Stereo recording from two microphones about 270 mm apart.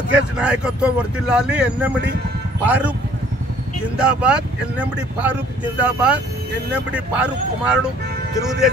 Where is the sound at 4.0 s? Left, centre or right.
Centre.